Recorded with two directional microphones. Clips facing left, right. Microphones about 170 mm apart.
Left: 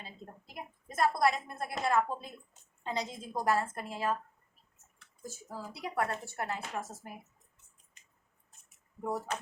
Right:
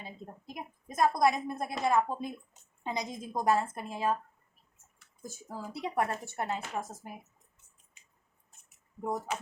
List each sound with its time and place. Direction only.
0.0 s a woman's voice: 15° right (ahead or behind)